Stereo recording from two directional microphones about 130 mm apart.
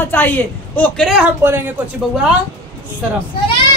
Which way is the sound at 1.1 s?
10° right (ahead or behind).